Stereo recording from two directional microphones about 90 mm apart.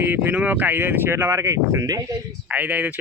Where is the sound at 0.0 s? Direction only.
20° right (ahead or behind).